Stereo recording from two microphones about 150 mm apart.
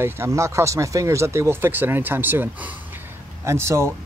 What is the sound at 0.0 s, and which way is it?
Speech, 20° right (ahead or behind).